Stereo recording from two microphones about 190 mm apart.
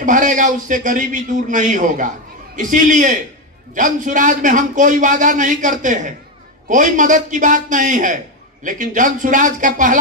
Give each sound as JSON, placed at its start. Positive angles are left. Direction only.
{"t": 0.0, "sound": "a man's voice", "side_deg": -40}